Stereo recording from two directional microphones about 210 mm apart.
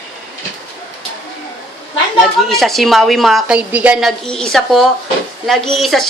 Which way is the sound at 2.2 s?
Centre (ahead or behind).